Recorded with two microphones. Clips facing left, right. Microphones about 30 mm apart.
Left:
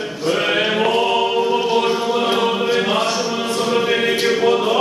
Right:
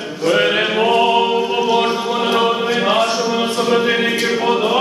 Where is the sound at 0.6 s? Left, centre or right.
Centre.